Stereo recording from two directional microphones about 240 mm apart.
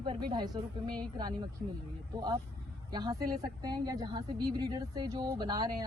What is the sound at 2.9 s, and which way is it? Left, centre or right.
Speech, centre.